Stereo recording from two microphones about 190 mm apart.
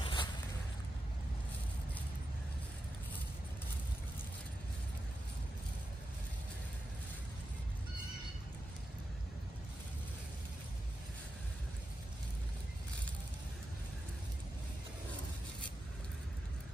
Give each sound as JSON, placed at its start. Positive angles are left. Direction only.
{"t": 0.0, "sound": "zipper", "side_deg": 25}